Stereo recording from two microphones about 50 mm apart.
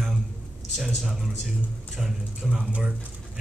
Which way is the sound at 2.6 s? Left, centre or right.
Right.